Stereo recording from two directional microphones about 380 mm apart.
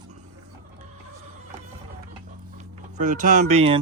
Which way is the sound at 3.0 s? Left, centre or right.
Centre.